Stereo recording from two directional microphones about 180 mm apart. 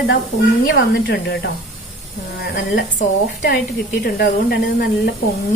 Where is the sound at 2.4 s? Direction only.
60° left (ahead or behind).